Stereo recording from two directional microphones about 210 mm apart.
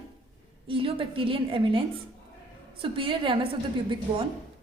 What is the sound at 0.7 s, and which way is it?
A woman's voice, 25° right (ahead or behind).